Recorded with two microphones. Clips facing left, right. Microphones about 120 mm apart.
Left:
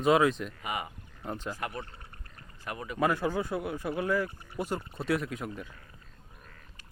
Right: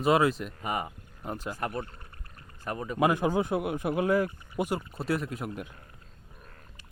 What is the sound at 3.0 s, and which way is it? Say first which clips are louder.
Speech: right 3 dB; 15° right (ahead or behind).